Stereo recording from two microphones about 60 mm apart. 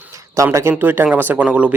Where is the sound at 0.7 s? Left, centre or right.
Right.